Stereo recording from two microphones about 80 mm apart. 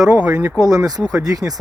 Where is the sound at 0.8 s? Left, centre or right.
Right.